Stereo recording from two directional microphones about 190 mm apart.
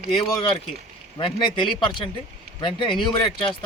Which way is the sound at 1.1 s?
25° left (ahead or behind).